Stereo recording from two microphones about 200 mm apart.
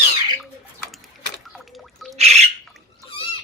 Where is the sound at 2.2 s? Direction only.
30° right (ahead or behind).